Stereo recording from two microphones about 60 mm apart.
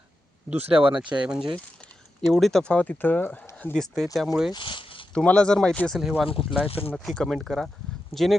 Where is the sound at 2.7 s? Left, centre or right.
Left.